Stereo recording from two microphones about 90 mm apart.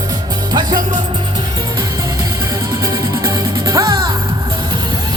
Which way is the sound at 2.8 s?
40° right (ahead or behind).